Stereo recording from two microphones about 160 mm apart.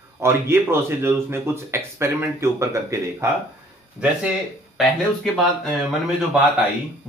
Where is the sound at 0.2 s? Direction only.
15° right (ahead or behind).